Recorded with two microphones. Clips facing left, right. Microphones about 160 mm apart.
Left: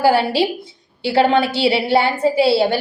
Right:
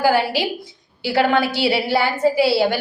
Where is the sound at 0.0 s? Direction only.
30° left (ahead or behind).